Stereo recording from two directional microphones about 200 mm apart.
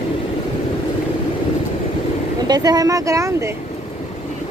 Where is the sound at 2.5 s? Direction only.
20° right (ahead or behind).